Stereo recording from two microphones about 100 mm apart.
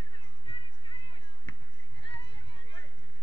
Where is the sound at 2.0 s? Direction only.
55° left (ahead or behind).